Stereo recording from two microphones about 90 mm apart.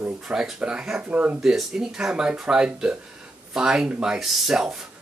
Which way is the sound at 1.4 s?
5° right (ahead or behind).